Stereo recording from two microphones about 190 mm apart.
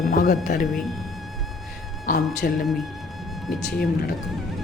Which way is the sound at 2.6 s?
Centre (ahead or behind).